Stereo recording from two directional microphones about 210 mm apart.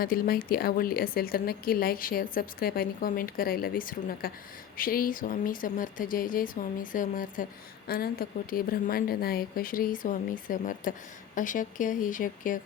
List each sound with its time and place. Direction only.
0.0 s a woman's voice: 45° left (ahead or behind)